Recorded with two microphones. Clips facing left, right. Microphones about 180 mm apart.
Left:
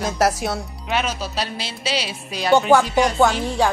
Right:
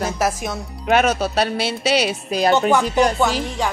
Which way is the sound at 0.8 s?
60° right (ahead or behind).